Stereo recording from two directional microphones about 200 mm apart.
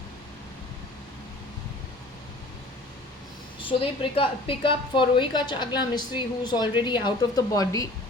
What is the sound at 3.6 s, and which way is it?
A woman's voice, 25° left (ahead or behind).